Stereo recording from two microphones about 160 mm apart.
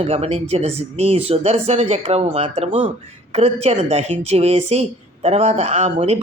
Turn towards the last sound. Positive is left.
turn(degrees=-45)  # may be behind; listen again after turning